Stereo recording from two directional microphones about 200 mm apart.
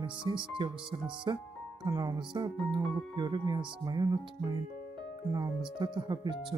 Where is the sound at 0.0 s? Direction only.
25° right (ahead or behind).